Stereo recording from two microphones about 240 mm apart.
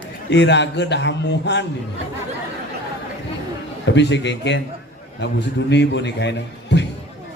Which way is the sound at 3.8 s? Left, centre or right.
Left.